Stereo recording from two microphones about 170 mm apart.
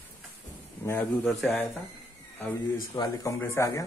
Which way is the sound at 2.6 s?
20° left (ahead or behind).